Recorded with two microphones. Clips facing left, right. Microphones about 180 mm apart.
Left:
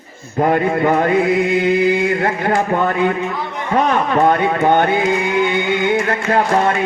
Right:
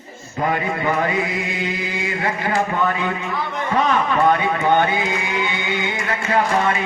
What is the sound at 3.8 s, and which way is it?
Speech, 50° left (ahead or behind).